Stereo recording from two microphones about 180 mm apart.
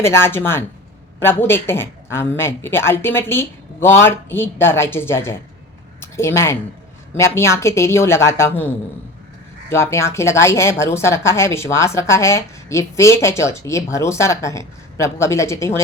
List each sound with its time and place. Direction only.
0.0 s a woman's voice: 15° left (ahead or behind)